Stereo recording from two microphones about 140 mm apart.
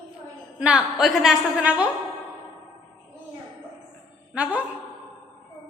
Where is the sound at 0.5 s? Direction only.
5° right (ahead or behind).